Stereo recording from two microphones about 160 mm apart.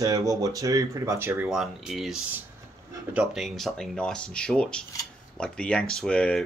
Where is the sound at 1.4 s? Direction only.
Centre (ahead or behind).